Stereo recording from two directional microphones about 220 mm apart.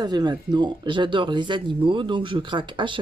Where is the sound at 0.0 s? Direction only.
20° right (ahead or behind).